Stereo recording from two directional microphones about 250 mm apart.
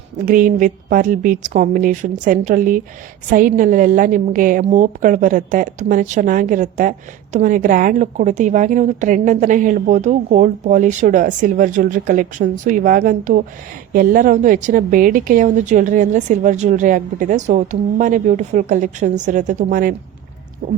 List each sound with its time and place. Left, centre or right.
0.3 s a woman's voice: right